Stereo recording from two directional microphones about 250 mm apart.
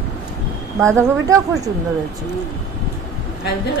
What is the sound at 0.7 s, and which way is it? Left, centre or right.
Speech, centre.